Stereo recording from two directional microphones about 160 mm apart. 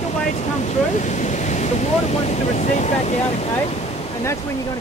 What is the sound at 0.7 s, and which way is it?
Speech, 50° left (ahead or behind).